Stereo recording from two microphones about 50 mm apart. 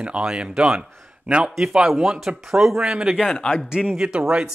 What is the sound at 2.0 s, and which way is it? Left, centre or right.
Speech, centre.